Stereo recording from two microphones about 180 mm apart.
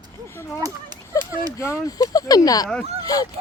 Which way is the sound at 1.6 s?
15° left (ahead or behind).